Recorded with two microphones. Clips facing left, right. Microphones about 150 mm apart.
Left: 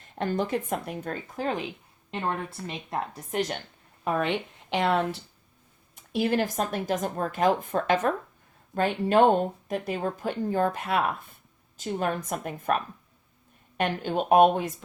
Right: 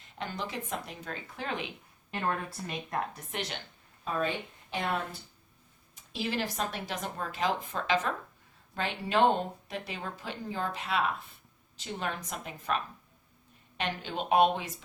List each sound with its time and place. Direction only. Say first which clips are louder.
0.2 s speech: left 10 dB; 50° left (ahead or behind)
2.0 s speech: left 2 dB; 20° left (ahead or behind)
3.3 s speech: left 10 dB; 45° left (ahead or behind)
4.0 s speech: left 5 dB; 70° left (ahead or behind)
5.9 s speech: left 9 dB; 55° left (ahead or behind)